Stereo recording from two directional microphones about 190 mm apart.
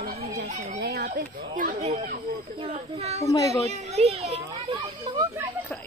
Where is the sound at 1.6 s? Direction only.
40° right (ahead or behind).